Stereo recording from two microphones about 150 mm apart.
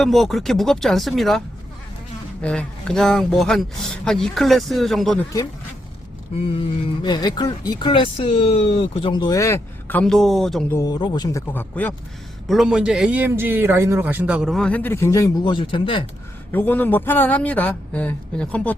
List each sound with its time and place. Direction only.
0.0 s speech: centre (ahead or behind)
2.4 s speech: 10° left (ahead or behind)
6.3 s speech: 40° left (ahead or behind); by 10.0 s 20° left (ahead or behind)
10.0 s speech: 5° left (ahead or behind)
10.7 s speech: 20° left (ahead or behind)
11.7 s speech: 10° left (ahead or behind)
12.5 s a man's voice: 5° right (ahead or behind); by 15.3 s 20° left (ahead or behind)
15.4 s speech: 35° left (ahead or behind)
16.5 s speech: 15° left (ahead or behind)